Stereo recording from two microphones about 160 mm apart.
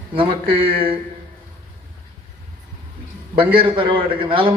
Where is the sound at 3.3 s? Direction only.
35° right (ahead or behind).